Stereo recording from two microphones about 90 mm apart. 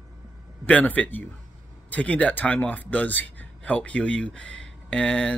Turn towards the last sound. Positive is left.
turn(degrees=10)  # may be behind; listen again after turning